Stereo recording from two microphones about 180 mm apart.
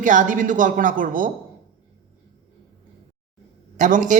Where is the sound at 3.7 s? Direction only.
45° right (ahead or behind).